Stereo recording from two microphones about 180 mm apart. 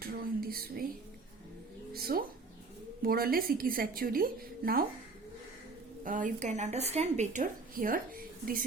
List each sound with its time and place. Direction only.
0.0 s a sound: 55° right (ahead or behind)
1.9 s cat: 55° right (ahead or behind)
3.0 s a woman's voice: 55° right (ahead or behind)
6.1 s a woman's voice: 45° right (ahead or behind)